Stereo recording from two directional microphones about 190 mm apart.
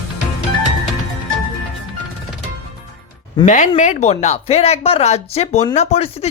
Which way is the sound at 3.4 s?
40° left (ahead or behind).